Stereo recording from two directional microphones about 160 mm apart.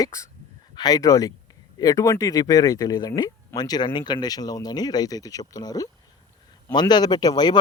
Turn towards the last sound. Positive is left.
turn(degrees=25)  # may be behind; listen again after turning